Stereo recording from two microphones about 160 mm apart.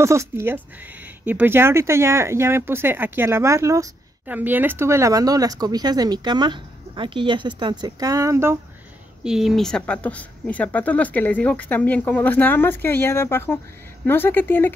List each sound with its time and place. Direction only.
0.0 s speech: 15° right (ahead or behind)
9.2 s a woman's voice: 5° right (ahead or behind); by 14.7 s 15° left (ahead or behind)